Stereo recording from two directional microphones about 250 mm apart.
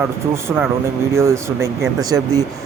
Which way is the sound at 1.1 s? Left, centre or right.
Centre.